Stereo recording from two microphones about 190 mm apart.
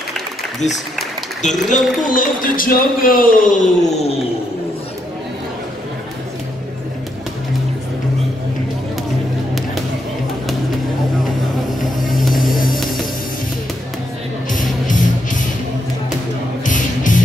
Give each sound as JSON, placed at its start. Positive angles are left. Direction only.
{"t": 1.4, "sound": "speech", "side_deg": 40}
{"t": 11.8, "sound": "vehicle", "side_deg": 45}
{"t": 12.7, "sound": "music", "side_deg": 0}
{"t": 14.5, "sound": "music", "side_deg": 45}
{"t": 16.6, "sound": "music", "side_deg": 40}